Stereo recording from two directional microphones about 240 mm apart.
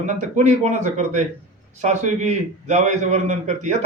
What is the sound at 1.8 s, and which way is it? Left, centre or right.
A man's voice, right.